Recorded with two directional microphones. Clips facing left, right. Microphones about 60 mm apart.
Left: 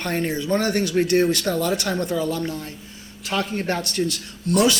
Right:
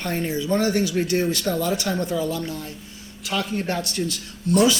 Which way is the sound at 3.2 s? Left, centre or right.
Left.